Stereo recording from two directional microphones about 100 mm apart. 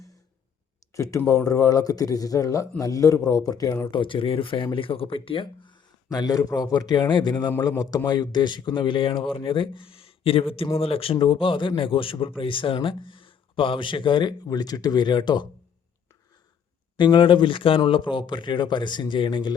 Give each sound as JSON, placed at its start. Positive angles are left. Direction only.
{"t": 0.9, "sound": "a man's voice", "side_deg": 35}
{"t": 3.9, "sound": "speech", "side_deg": 55}
{"t": 6.1, "sound": "speech", "side_deg": 40}
{"t": 17.0, "sound": "speech", "side_deg": 55}